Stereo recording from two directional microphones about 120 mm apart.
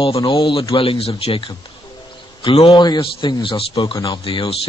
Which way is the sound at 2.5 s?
50° left (ahead or behind).